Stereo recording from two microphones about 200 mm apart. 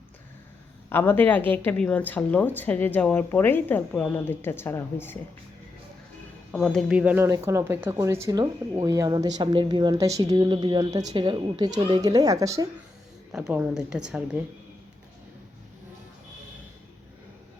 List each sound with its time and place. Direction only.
0.9 s speech: 10° left (ahead or behind)
6.5 s speech: centre (ahead or behind); by 12.6 s 15° right (ahead or behind)
13.3 s a woman's voice: 5° right (ahead or behind)